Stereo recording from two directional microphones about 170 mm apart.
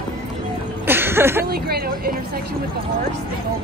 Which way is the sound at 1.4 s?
65° right (ahead or behind).